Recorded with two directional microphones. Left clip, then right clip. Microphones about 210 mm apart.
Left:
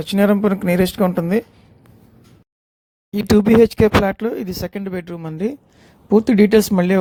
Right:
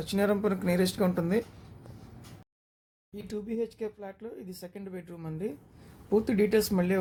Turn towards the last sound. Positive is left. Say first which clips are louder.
# left 12 dB
turn(degrees=40)  # may be behind; listen again after turning